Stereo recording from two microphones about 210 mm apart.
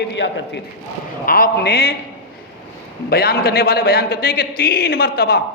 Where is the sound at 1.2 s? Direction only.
45° left (ahead or behind).